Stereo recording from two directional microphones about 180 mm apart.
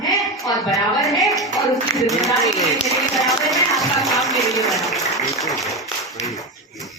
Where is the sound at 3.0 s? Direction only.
Centre (ahead or behind).